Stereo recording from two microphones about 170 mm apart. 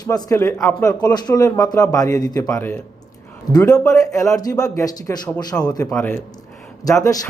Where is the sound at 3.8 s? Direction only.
20° left (ahead or behind).